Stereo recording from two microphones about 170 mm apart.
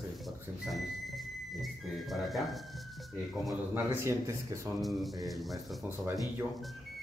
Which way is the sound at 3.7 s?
15° right (ahead or behind).